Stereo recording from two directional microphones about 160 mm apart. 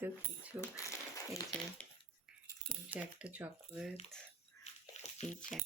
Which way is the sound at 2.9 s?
10° right (ahead or behind).